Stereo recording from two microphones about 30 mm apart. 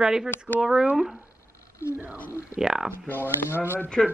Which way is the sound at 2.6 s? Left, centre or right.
Right.